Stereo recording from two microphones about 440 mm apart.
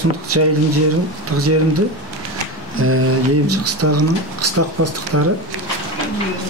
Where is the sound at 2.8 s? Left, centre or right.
Right.